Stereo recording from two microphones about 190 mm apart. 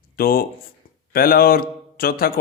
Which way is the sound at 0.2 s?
50° left (ahead or behind).